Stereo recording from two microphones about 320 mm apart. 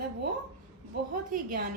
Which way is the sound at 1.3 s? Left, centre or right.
Right.